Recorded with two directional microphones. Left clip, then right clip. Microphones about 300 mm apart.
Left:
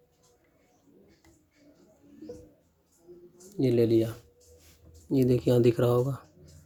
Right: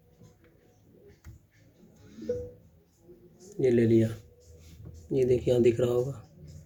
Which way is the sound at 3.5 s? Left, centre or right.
Left.